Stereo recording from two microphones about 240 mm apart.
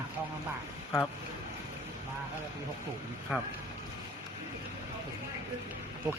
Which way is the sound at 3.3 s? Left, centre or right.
Centre.